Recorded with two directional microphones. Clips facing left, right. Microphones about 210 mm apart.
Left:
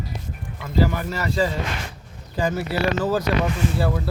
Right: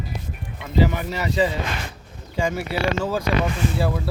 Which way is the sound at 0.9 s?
15° right (ahead or behind).